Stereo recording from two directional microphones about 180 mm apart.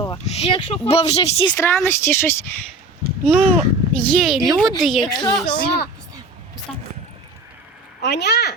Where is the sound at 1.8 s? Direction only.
15° left (ahead or behind).